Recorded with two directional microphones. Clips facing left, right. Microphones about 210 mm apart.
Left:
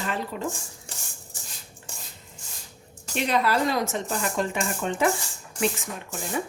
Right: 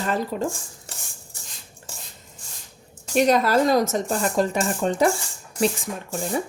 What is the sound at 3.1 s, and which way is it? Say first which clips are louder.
A woman's voice: right 6 dB; 40° right (ahead or behind).